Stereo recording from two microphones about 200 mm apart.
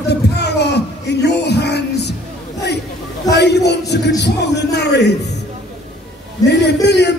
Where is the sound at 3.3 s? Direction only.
55° left (ahead or behind).